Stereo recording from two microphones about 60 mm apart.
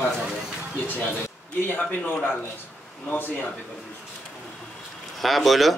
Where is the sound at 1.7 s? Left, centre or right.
Left.